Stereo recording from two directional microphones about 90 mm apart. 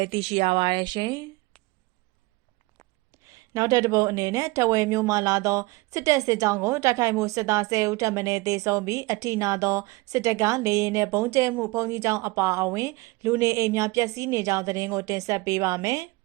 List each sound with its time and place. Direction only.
0.0 s speech: 85° right; by 1.3 s 45° right (ahead or behind)
3.5 s speech: 40° right (ahead or behind)